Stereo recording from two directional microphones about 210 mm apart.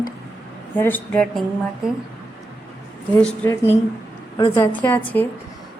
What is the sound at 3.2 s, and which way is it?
Speech, 10° left (ahead or behind).